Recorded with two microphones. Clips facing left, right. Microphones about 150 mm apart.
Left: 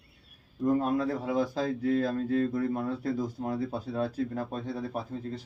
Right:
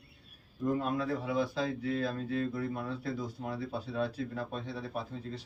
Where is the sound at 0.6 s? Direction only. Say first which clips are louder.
Left 5 dB; 45° left (ahead or behind).